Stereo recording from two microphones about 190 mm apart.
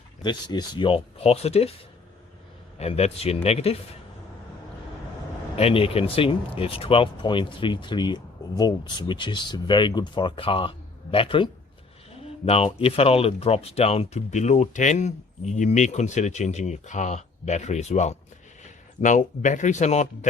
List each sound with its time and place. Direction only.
0.2 s speech: 25° left (ahead or behind)
2.7 s speech: 35° left (ahead or behind)
5.5 s speech: 30° left (ahead or behind)
12.5 s speech: 30° left (ahead or behind)